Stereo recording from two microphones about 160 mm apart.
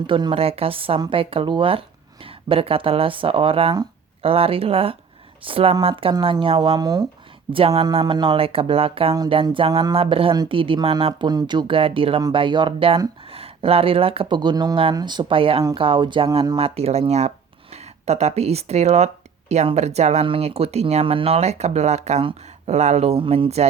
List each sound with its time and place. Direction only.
0.1 s speech: 30° right (ahead or behind)
7.5 s speech: 35° right (ahead or behind)